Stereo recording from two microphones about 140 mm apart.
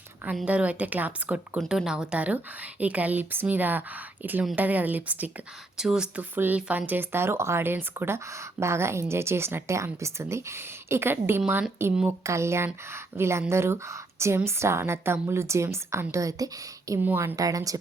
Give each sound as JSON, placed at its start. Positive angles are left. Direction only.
{"t": 0.4, "sound": "a woman's voice", "side_deg": -10}